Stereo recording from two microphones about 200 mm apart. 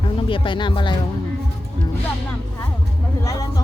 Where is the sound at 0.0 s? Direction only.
25° left (ahead or behind).